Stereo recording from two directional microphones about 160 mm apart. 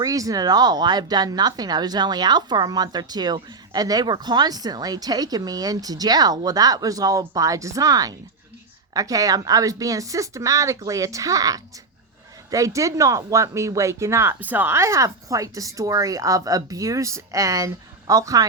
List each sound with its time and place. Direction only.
0.0 s speech: 20° right (ahead or behind)